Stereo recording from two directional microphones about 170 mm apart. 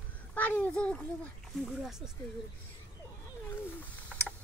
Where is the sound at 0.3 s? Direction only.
10° left (ahead or behind).